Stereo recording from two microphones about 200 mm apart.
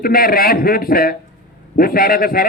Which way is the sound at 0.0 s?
45° left (ahead or behind).